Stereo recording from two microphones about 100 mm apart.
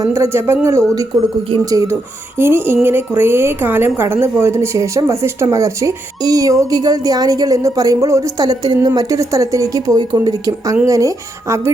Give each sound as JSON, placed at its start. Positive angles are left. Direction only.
{"t": 0.0, "sound": "speech", "side_deg": -30}
{"t": 2.4, "sound": "a woman's voice", "side_deg": -25}